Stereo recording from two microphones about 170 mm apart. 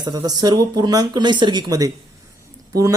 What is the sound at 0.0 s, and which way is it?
Speech, 25° right (ahead or behind).